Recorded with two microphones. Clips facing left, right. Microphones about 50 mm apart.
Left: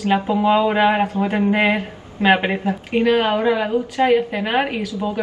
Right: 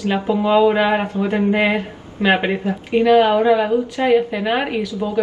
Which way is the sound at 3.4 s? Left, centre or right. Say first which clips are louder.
Right 3 dB; centre.